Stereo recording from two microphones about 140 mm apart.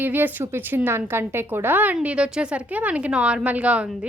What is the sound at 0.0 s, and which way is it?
A woman's voice, 15° right (ahead or behind).